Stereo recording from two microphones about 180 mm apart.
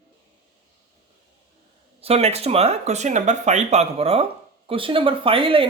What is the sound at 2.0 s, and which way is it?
Speech, 35° right (ahead or behind).